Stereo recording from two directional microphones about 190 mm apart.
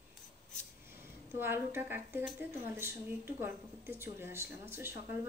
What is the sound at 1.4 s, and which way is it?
Speech, 10° right (ahead or behind).